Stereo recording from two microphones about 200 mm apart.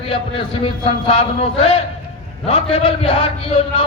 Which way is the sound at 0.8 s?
30° left (ahead or behind).